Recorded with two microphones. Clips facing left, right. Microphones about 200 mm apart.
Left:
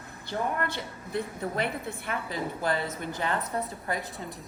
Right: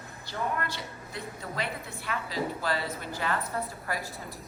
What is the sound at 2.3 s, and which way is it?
A woman's voice, 20° left (ahead or behind).